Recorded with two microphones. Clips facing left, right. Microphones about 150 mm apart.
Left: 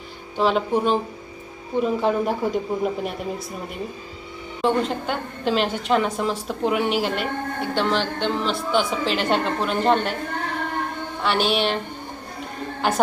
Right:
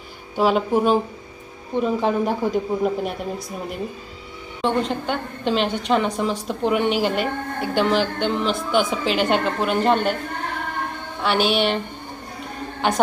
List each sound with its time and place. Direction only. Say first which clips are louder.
0.3 s a woman's voice: right 2 dB; 5° right (ahead or behind)
11.2 s a woman's voice: right 2 dB; centre (ahead or behind)
12.8 s a woman's voice: right 1 dB; centre (ahead or behind)